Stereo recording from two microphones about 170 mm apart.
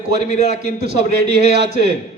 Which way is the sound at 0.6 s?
70° right (ahead or behind).